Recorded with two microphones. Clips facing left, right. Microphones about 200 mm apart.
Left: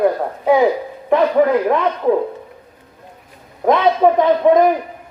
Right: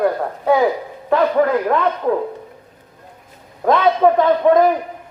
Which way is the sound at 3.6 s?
20° left (ahead or behind).